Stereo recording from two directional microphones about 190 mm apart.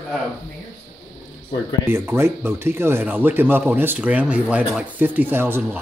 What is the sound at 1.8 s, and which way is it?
Speech, 10° right (ahead or behind).